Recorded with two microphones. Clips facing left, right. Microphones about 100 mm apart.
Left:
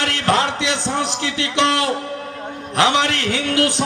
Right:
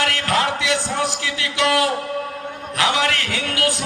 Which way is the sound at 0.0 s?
25° left (ahead or behind).